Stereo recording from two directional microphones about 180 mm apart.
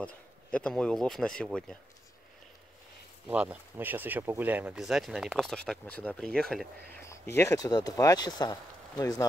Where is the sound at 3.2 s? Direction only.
10° right (ahead or behind).